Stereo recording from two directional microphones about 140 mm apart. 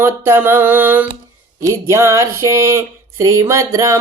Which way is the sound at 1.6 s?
20° right (ahead or behind).